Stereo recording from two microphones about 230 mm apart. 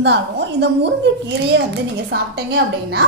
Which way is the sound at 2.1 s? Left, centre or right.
Right.